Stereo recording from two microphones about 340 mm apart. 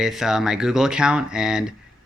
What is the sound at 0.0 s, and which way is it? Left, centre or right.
Speech, centre.